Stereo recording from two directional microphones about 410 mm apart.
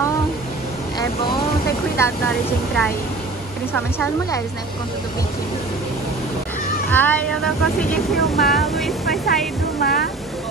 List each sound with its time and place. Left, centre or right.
2.0 s speech: centre
6.9 s speech: centre
9.0 s speech: left